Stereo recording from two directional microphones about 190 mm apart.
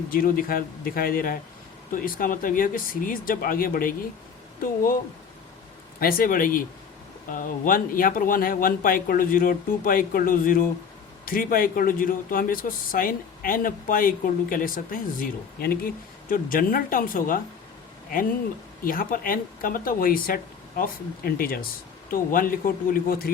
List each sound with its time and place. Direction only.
0.1 s speech: 50° left (ahead or behind)
6.0 s speech: 50° left (ahead or behind)